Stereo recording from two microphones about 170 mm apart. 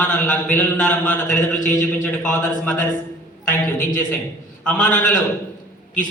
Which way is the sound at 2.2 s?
10° left (ahead or behind).